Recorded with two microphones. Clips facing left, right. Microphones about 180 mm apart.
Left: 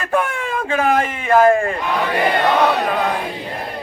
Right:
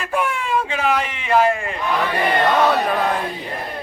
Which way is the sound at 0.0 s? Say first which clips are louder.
Left 2 dB; 50° left (ahead or behind).